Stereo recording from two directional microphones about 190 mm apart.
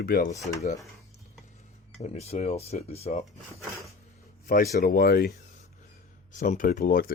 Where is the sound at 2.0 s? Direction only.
35° left (ahead or behind).